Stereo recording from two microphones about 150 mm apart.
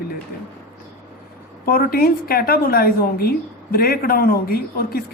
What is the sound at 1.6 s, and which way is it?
A woman's voice, 80° left.